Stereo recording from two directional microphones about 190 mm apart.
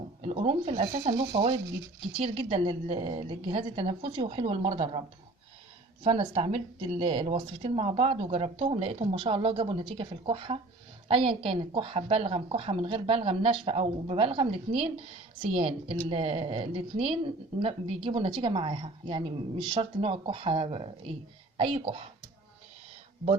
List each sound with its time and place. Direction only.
0.2 s speech: 35° right (ahead or behind)